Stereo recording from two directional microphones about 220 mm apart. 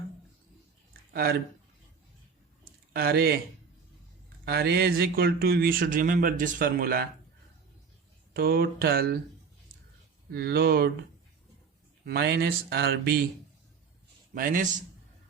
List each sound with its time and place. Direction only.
1.1 s speech: 45° right (ahead or behind)
2.9 s speech: 45° right (ahead or behind)
4.4 s speech: 45° right (ahead or behind)
8.3 s speech: 45° right (ahead or behind)
10.3 s speech: 45° right (ahead or behind)
12.0 s speech: 45° right (ahead or behind)
14.3 s a man's voice: 40° right (ahead or behind)